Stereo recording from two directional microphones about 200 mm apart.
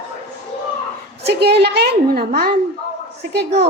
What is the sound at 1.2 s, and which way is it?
A woman's voice, 55° right (ahead or behind).